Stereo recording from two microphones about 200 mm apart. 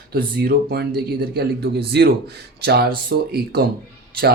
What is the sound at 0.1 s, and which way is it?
A man's voice, 50° right (ahead or behind).